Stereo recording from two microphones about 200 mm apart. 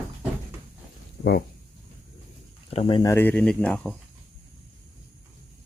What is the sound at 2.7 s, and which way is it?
Speech, 30° left (ahead or behind).